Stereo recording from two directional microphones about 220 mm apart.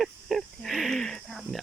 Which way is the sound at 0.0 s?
Centre (ahead or behind).